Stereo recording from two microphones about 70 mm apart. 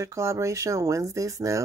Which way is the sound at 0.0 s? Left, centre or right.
Right.